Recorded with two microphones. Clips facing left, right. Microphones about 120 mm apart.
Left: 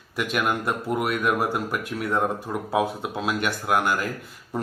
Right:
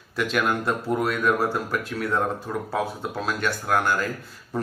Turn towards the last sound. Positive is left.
turn(degrees=15)  # may be behind; listen again after turning